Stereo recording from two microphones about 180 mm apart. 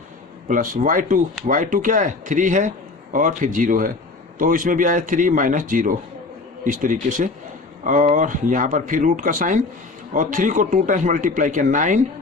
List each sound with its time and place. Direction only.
0.4 s a man's voice: 45° right (ahead or behind)